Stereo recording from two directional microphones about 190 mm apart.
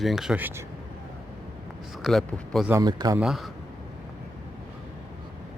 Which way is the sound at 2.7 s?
20° right (ahead or behind).